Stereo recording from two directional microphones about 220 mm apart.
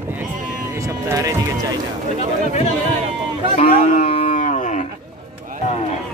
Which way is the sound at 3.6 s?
30° left (ahead or behind).